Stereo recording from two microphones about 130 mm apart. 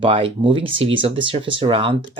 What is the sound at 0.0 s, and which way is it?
Speech, 40° right (ahead or behind).